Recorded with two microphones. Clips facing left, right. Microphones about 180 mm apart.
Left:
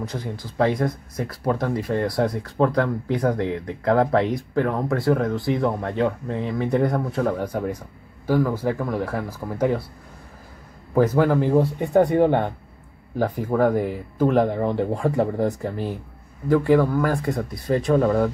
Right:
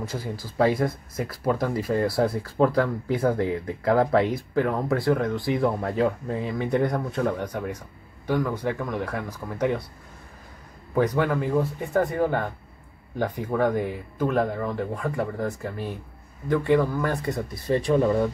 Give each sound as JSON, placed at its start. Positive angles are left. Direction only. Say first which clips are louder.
{"t": 0.0, "sound": "speech", "louder": "left 2 dB", "side_deg": -5}
{"t": 11.2, "sound": "speech", "louder": "left 5 dB", "side_deg": 30}
{"t": 13.2, "sound": "speech", "louder": "left 4 dB", "side_deg": 5}
{"t": 17.1, "sound": "speech", "louder": "left 3 dB", "side_deg": 0}